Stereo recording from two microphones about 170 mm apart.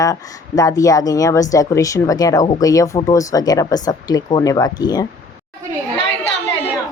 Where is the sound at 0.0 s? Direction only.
20° left (ahead or behind).